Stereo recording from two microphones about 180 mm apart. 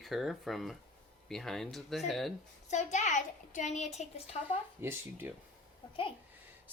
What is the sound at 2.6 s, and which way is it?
A child's voice, 40° left (ahead or behind).